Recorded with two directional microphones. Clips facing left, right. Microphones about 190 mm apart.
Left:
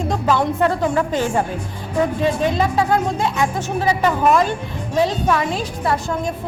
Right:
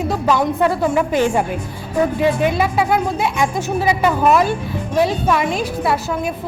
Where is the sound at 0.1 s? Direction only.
10° right (ahead or behind).